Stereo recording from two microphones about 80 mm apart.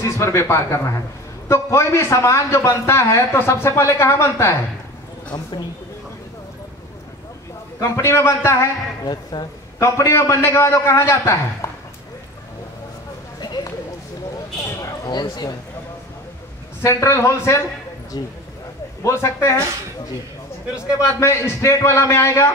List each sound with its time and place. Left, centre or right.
0.0 s a man's voice: left
7.8 s a man's voice: left
9.0 s speech: left
9.8 s a man's voice: left
14.6 s a sound: left
15.0 s speech: left
16.8 s a man's voice: left
18.1 s speech: left
19.0 s a man's voice: left
20.7 s a man's voice: centre
21.2 s a man's voice: left